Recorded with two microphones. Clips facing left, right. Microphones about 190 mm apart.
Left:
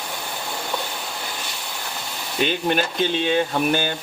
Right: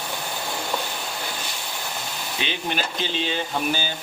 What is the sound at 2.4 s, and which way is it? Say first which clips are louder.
Speech: left 7 dB; 50° left (ahead or behind).